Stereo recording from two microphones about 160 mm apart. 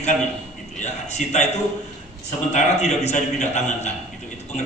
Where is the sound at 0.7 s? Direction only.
45° left (ahead or behind).